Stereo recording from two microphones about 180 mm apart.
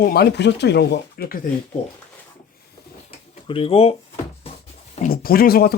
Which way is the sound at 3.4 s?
30° left (ahead or behind).